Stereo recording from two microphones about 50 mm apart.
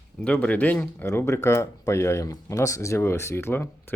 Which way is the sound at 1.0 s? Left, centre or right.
Left.